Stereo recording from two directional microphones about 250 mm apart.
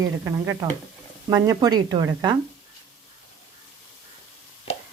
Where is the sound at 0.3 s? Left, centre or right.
Centre.